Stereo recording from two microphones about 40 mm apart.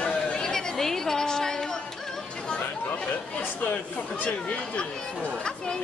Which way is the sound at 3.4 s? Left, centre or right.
Left.